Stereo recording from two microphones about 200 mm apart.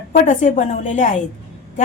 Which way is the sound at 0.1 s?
40° left (ahead or behind).